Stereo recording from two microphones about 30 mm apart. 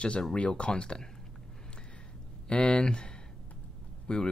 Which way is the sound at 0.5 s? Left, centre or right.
Left.